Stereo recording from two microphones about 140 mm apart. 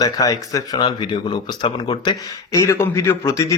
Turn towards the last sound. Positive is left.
turn(degrees=20)  # may be behind; listen again after turning